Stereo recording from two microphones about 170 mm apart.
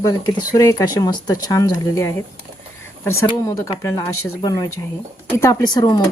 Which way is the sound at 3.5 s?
20° left (ahead or behind).